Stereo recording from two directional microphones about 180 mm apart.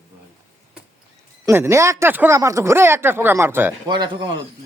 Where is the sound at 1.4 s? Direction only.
15° right (ahead or behind).